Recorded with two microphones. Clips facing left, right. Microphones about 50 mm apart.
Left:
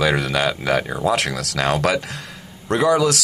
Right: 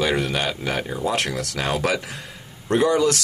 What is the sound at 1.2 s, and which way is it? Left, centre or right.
Speech, left.